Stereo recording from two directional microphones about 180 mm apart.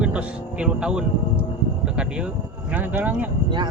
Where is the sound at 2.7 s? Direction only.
10° right (ahead or behind).